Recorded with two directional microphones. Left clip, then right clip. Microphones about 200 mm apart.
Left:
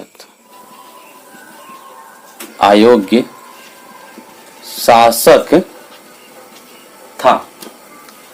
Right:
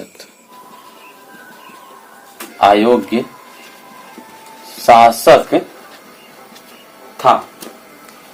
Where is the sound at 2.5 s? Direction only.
55° left (ahead or behind).